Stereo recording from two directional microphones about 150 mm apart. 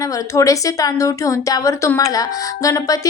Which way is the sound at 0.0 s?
20° left (ahead or behind).